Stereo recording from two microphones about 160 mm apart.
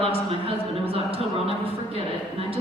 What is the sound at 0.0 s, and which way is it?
Speech, 35° right (ahead or behind).